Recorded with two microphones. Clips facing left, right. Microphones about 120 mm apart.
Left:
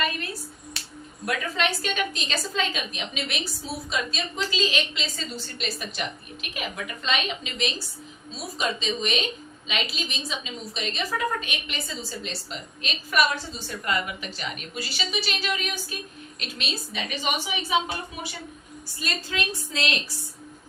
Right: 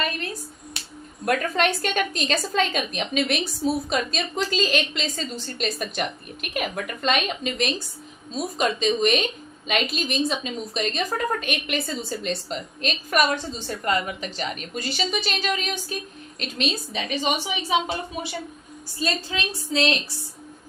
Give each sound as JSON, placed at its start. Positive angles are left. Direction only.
{"t": 1.2, "sound": "a woman's voice", "side_deg": -50}
{"t": 18.9, "sound": "a woman's voice", "side_deg": -25}